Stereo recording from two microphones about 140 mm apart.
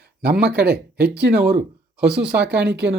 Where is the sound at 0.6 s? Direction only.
90° right.